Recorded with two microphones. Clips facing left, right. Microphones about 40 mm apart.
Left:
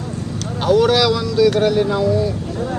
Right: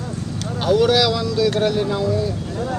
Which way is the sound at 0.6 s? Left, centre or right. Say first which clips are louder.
Left 2 dB; centre.